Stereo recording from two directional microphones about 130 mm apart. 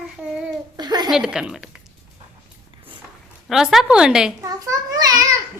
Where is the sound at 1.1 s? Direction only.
5° right (ahead or behind).